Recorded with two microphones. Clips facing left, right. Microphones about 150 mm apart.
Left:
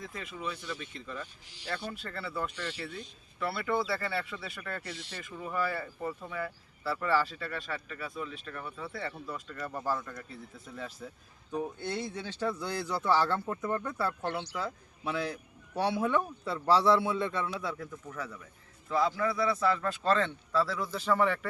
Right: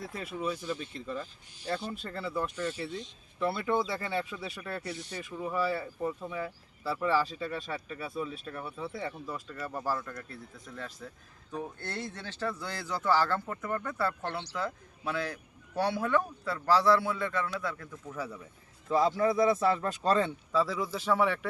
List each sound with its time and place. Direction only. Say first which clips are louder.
0.0 s speech: right 4 dB; 35° right (ahead or behind)
2.0 s a man's voice: right 2 dB; 15° right (ahead or behind); by 17.4 s 25° left (ahead or behind)
17.4 s speech: even; 5° left (ahead or behind)
18.9 s speech: right 3 dB; 20° right (ahead or behind); by 21.4 s 5° right (ahead or behind)